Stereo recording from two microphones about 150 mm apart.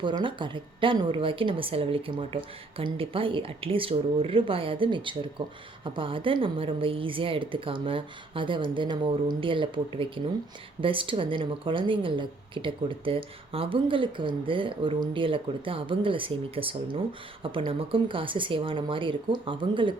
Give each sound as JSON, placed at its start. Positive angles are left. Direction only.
{"t": 0.0, "sound": "a woman's voice", "side_deg": -35}